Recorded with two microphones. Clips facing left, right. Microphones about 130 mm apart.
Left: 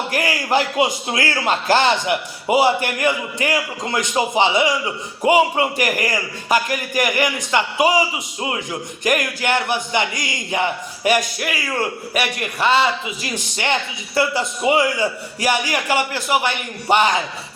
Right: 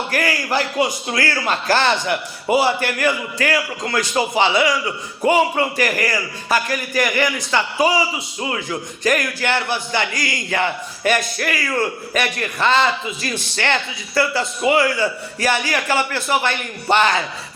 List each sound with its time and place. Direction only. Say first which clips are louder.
0.1 s a man's voice: left 2 dB; 20° left (ahead or behind)
9.0 s speech: even; 15° left (ahead or behind)